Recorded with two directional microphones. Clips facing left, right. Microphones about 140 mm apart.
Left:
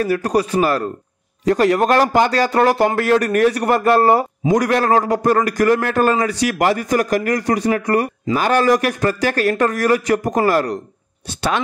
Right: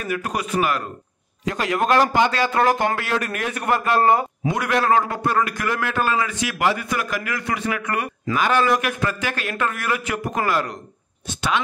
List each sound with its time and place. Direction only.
0.0 s a man's voice: 35° left (ahead or behind)